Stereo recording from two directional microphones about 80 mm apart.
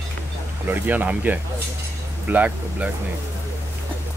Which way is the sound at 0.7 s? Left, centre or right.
Right.